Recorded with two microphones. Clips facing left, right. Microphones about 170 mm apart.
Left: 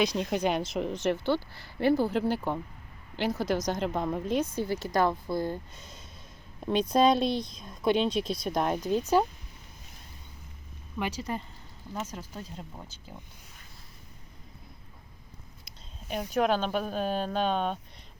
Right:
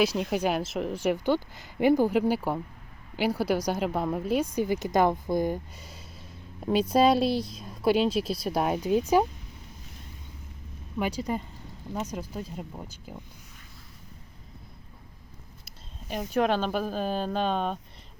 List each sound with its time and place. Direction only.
0.0 s a woman's voice: 5° right (ahead or behind)
10.9 s a woman's voice: 10° right (ahead or behind)
16.0 s speech: centre (ahead or behind)